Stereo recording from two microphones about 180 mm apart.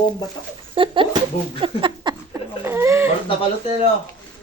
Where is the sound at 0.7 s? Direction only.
30° right (ahead or behind).